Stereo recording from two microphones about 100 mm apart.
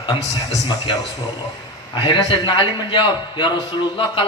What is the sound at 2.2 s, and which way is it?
A man's voice, 50° left (ahead or behind).